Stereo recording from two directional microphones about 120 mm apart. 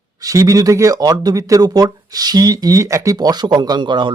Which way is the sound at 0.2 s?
30° right (ahead or behind).